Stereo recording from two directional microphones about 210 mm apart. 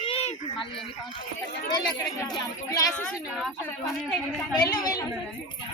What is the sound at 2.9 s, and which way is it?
Speech, 5° left (ahead or behind).